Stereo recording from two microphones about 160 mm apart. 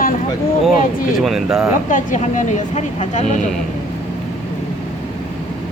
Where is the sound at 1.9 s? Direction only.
55° left (ahead or behind).